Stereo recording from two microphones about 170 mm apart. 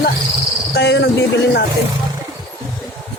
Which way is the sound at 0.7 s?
80° left.